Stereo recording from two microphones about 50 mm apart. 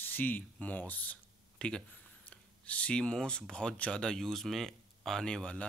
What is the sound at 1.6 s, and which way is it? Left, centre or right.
Speech, centre.